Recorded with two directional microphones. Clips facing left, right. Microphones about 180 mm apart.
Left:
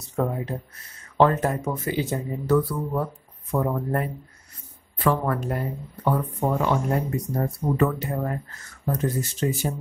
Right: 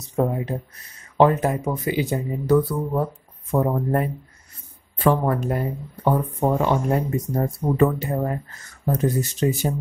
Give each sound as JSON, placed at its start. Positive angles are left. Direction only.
{"t": 0.1, "sound": "speech", "side_deg": -15}